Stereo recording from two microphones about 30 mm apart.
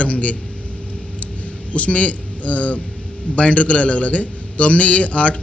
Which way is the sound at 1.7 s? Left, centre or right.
Left.